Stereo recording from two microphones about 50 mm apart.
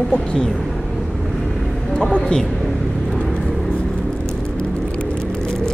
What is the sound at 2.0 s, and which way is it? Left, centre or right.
Speech, centre.